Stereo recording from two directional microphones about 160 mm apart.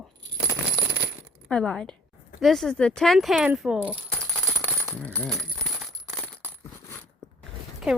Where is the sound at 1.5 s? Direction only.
5° left (ahead or behind).